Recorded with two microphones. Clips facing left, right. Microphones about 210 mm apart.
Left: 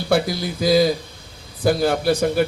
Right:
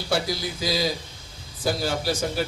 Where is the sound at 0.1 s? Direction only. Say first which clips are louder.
Left 6 dB; 55° left (ahead or behind).